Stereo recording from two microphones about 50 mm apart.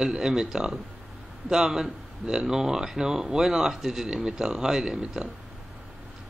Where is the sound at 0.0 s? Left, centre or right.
Centre.